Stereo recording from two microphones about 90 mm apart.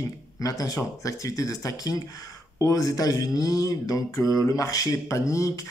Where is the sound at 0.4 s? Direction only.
40° left (ahead or behind).